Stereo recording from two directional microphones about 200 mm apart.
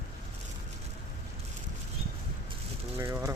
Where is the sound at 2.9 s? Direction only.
15° right (ahead or behind).